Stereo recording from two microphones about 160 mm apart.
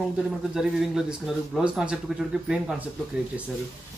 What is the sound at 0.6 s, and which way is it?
A man's voice, centre (ahead or behind).